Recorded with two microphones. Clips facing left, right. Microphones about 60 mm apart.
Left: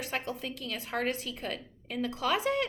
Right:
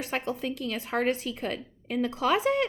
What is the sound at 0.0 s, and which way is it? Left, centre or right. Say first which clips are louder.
A woman's voice: right 4 dB; right.